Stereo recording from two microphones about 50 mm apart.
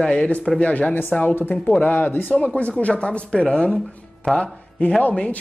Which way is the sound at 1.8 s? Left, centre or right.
Left.